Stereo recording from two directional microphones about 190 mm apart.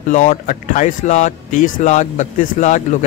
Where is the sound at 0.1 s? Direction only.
45° left (ahead or behind).